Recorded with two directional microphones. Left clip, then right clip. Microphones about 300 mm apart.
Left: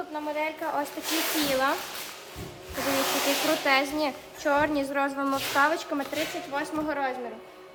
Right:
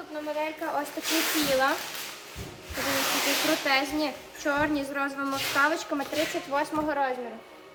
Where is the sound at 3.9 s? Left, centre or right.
Centre.